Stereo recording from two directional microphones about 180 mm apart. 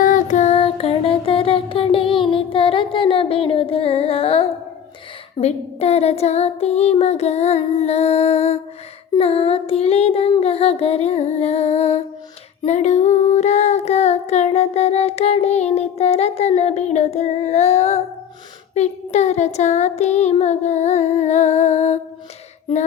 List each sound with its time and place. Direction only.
0.0 s music: 45° left (ahead or behind)
5.4 s child singing: 35° left (ahead or behind)